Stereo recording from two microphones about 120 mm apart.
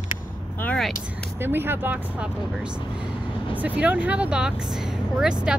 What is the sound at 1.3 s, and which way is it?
Speech, 20° right (ahead or behind).